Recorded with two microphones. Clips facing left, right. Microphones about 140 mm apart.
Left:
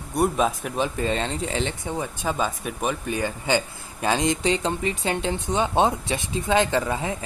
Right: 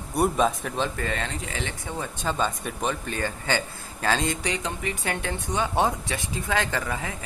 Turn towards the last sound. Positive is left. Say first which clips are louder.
# left 5 dB
turn(degrees=25)  # may be behind; listen again after turning